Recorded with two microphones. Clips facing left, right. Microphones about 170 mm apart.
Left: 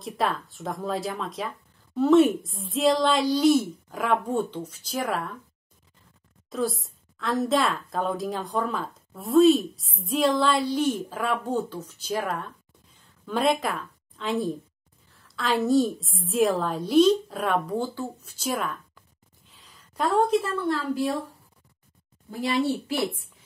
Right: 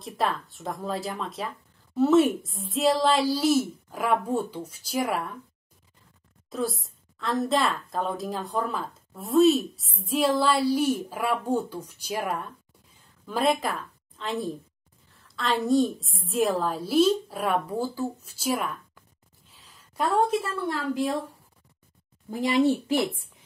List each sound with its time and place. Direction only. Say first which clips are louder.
0.0 s a woman's voice: left 1 dB; centre (ahead or behind)
6.5 s a woman's voice: left 2 dB; centre (ahead or behind)
13.3 s a woman's voice: left 1 dB; centre (ahead or behind)
19.6 s a sound: left 1 dB; centre (ahead or behind)
20.6 s a woman's voice: left 1 dB; 15° right (ahead or behind)